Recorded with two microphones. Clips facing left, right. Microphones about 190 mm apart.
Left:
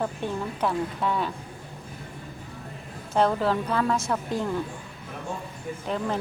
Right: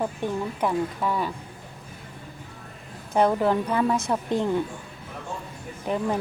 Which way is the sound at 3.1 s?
15° right (ahead or behind).